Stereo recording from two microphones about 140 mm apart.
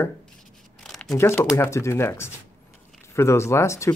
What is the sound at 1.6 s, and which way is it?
Speech, 20° left (ahead or behind).